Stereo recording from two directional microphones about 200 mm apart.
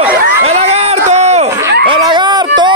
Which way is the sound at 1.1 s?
35° right (ahead or behind).